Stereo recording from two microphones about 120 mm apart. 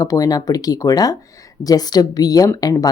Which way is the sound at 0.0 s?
30° left (ahead or behind).